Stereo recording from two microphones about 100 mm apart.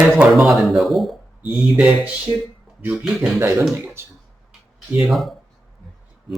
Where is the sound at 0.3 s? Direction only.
Centre (ahead or behind).